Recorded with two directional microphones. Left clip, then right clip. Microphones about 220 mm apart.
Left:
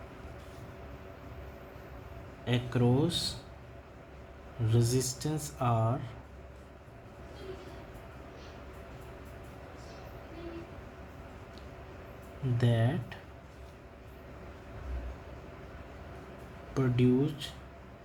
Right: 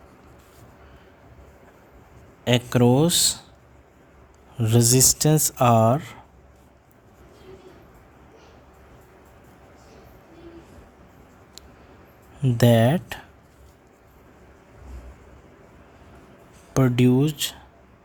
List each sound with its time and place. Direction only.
2.4 s speech: 60° right (ahead or behind)
4.6 s speech: 60° right (ahead or behind)
12.5 s speech: 60° right (ahead or behind)
16.7 s speech: 60° right (ahead or behind)